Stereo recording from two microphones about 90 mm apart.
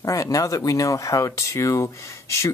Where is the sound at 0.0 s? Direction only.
40° left (ahead or behind).